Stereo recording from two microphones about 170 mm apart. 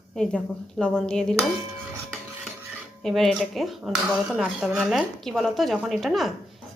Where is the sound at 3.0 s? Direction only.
Centre (ahead or behind).